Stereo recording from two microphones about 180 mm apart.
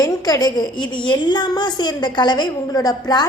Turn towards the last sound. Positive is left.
turn(degrees=20)  # may be behind; listen again after turning